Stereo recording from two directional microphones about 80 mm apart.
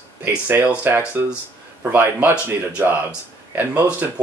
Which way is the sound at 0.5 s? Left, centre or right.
Right.